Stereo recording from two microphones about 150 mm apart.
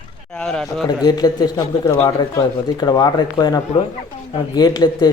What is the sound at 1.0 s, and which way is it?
Speech, 25° left (ahead or behind).